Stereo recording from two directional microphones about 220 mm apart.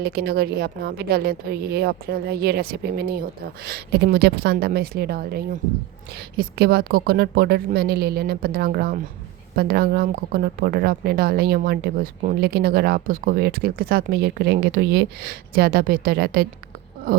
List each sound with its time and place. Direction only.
0.0 s speech: 45° right (ahead or behind)